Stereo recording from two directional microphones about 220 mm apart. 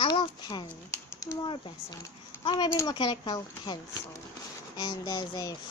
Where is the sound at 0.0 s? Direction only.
20° left (ahead or behind).